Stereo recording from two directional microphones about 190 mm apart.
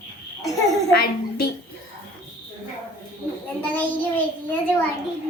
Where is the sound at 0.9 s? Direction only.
55° left (ahead or behind).